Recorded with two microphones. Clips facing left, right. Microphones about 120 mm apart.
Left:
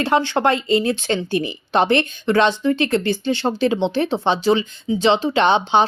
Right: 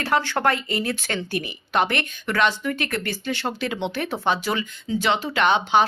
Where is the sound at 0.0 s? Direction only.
20° left (ahead or behind).